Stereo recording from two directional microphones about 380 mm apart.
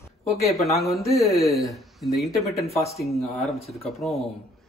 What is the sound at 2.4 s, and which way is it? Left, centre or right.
Speech, centre.